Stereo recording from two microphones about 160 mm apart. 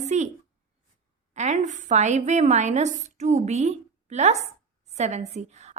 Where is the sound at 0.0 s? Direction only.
45° right (ahead or behind).